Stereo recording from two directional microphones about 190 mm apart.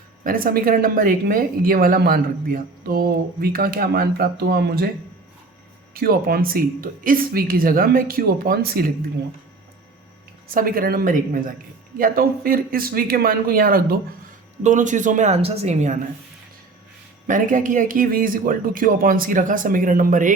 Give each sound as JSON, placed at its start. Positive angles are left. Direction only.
{"t": 0.3, "sound": "speech", "side_deg": -50}
{"t": 5.9, "sound": "speech", "side_deg": -50}
{"t": 10.5, "sound": "speech", "side_deg": -50}
{"t": 17.2, "sound": "speech", "side_deg": -45}